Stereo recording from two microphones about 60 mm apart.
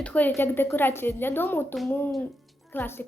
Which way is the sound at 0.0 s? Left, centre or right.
Left.